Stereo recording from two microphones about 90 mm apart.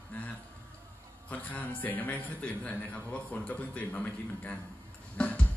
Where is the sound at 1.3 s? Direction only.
20° left (ahead or behind).